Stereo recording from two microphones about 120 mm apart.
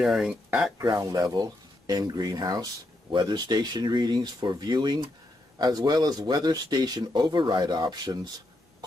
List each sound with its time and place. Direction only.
0.0 s speech: 5° right (ahead or behind)
0.7 s speech: 30° right (ahead or behind)